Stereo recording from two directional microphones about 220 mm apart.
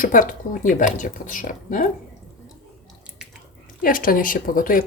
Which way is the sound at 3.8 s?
40° left (ahead or behind).